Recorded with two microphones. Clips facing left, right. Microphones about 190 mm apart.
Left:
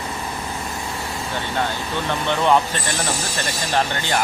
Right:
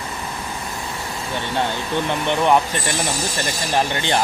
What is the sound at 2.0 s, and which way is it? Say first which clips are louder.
Speech: even; 15° right (ahead or behind).